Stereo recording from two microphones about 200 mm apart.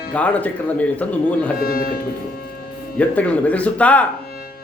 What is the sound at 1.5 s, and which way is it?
Speech, 50° left (ahead or behind).